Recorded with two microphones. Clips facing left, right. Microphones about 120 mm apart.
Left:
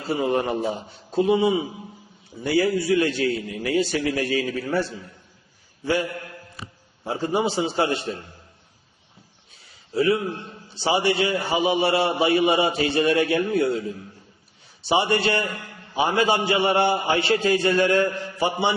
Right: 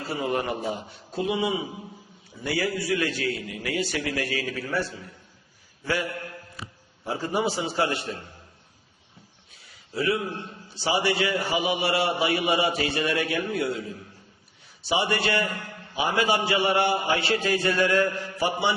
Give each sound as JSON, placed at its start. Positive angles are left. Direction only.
{"t": 0.0, "sound": "a man's voice", "side_deg": 25}
{"t": 10.0, "sound": "a man's voice", "side_deg": 35}
{"t": 10.8, "sound": "a man's voice", "side_deg": 25}
{"t": 14.8, "sound": "a man's voice", "side_deg": 30}